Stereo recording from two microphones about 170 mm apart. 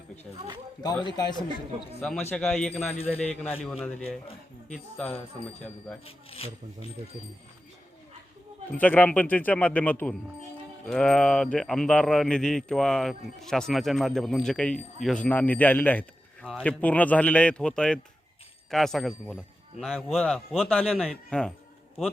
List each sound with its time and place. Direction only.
1.0 s speech: 25° left (ahead or behind)
2.0 s speech: 5° left (ahead or behind)
6.1 s speech: 35° left (ahead or behind)
8.7 s speech: 10° left (ahead or behind)